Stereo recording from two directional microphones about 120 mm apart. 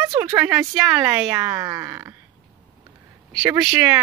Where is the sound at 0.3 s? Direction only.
25° right (ahead or behind).